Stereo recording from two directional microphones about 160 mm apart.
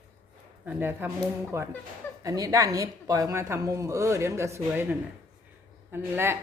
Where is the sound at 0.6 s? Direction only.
10° right (ahead or behind).